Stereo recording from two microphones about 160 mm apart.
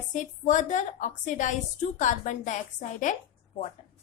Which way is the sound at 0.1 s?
50° left (ahead or behind).